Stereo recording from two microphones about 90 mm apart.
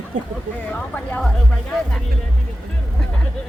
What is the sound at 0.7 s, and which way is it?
Speech, 15° left (ahead or behind).